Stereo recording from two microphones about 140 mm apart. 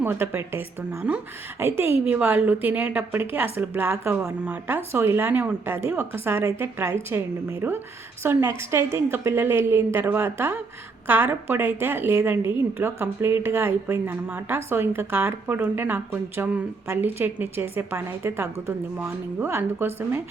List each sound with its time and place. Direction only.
0.0 s a woman's voice: 15° right (ahead or behind)
8.2 s a woman's voice: 20° right (ahead or behind)